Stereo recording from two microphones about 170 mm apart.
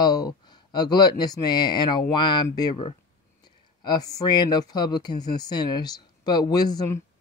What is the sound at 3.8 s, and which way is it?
Speech, 20° left (ahead or behind).